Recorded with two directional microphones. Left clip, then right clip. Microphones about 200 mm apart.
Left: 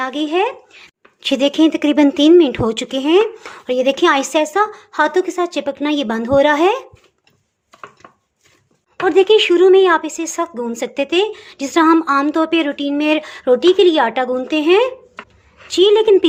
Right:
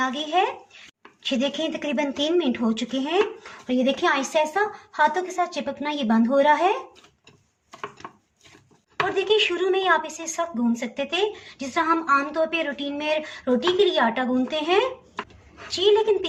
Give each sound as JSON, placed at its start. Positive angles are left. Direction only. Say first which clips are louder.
{"t": 0.0, "sound": "speech", "louder": "left 5 dB", "side_deg": 45}
{"t": 9.0, "sound": "speech", "louder": "left 11 dB", "side_deg": 45}